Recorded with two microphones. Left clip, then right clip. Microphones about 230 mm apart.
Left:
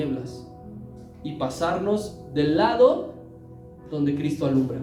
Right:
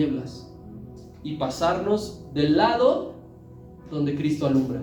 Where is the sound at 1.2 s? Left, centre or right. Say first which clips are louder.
Right 1 dB; left.